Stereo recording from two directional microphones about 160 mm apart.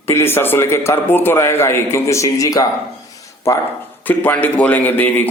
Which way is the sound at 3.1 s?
20° left (ahead or behind).